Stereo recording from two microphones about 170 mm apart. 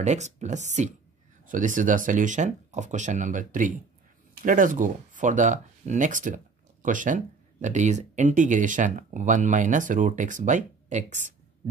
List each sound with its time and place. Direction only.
0.0 s speech: 45° right (ahead or behind)